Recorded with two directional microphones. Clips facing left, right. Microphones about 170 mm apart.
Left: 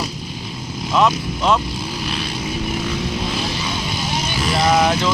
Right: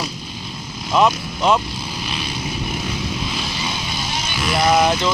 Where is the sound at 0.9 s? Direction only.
5° right (ahead or behind).